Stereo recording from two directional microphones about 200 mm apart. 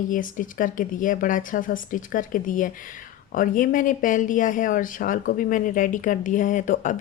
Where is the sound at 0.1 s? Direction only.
40° left (ahead or behind).